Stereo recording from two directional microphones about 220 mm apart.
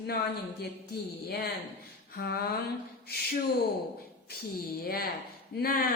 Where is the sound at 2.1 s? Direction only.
45° left (ahead or behind).